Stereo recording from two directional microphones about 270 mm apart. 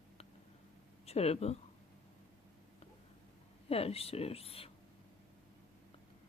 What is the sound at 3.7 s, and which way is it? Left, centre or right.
Speech, left.